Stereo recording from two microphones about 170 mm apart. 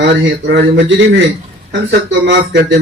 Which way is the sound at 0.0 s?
90° right.